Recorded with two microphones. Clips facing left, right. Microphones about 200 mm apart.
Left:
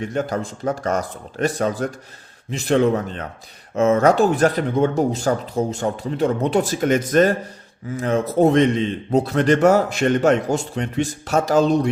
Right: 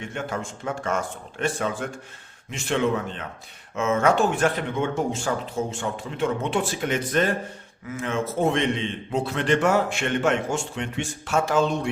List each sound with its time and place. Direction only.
0.0 s a man's voice: 40° left (ahead or behind)